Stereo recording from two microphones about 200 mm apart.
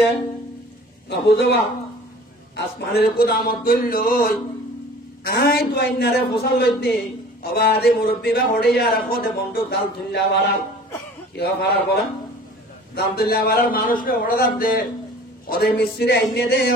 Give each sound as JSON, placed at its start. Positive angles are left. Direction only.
{"t": 1.2, "sound": "a man's voice", "side_deg": 55}
{"t": 12.9, "sound": "speech", "side_deg": 50}